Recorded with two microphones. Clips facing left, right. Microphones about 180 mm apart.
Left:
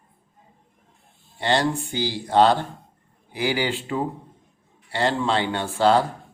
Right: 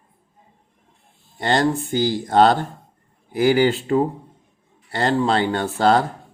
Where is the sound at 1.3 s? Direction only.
45° right (ahead or behind).